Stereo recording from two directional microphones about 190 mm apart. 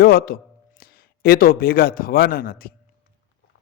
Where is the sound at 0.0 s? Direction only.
50° left (ahead or behind).